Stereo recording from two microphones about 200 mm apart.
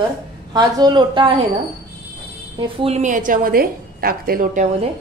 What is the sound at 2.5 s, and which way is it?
A woman's voice, 25° right (ahead or behind).